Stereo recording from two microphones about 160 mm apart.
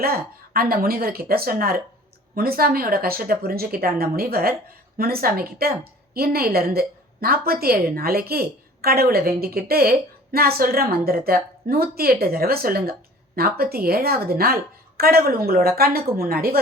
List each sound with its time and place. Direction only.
0.0 s a woman's voice: 70° right (ahead or behind)